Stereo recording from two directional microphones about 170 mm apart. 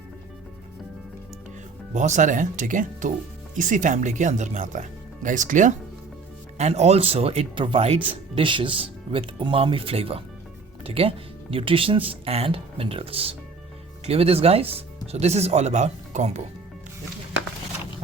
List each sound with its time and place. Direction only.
1.9 s speech: 45° right (ahead or behind)